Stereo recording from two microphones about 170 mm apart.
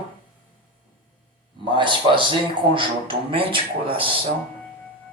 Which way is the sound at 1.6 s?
30° right (ahead or behind).